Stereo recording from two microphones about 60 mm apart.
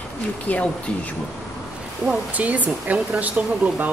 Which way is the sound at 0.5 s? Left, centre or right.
Left.